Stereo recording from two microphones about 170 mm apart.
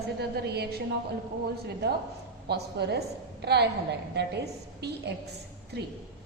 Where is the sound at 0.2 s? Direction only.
70° right (ahead or behind).